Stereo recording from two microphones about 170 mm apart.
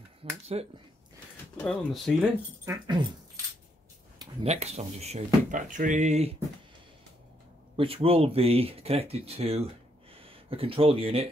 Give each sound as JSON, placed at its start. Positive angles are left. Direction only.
{"t": 0.2, "sound": "finger snapping", "side_deg": -40}
{"t": 1.6, "sound": "speech", "side_deg": 5}
{"t": 2.6, "sound": "speech", "side_deg": -25}
{"t": 4.4, "sound": "speech", "side_deg": -40}
{"t": 7.7, "sound": "speech", "side_deg": -35}